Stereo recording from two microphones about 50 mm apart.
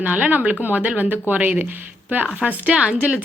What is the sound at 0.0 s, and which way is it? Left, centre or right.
A woman's voice, right.